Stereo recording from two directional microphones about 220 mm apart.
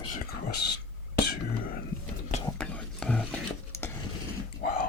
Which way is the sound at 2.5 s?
5° left (ahead or behind).